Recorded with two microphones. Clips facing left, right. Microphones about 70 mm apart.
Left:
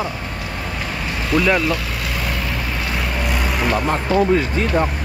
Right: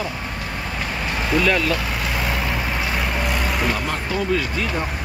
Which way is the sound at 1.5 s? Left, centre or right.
Centre.